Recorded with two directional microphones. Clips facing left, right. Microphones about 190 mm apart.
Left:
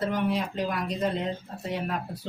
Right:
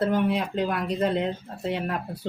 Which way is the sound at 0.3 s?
55° right (ahead or behind).